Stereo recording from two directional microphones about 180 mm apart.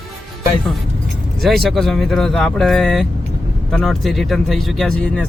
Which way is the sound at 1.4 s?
Centre (ahead or behind).